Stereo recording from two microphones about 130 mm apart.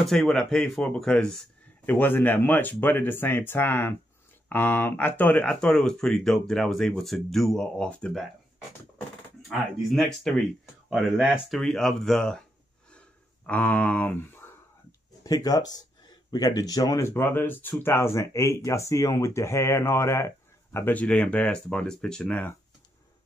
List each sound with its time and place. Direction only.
0.0 s speech: centre (ahead or behind)
1.9 s speech: 15° left (ahead or behind)
9.5 s speech: centre (ahead or behind)
13.5 s speech: 10° left (ahead or behind)
15.2 s speech: 30° left (ahead or behind); by 22.6 s 10° left (ahead or behind)